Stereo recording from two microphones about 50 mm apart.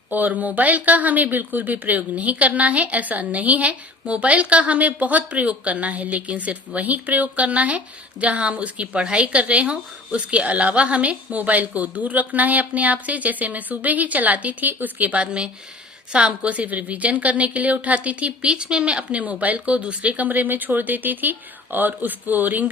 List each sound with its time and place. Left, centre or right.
0.1 s a woman's voice: right
18.4 s a woman's voice: centre; by 22.7 s right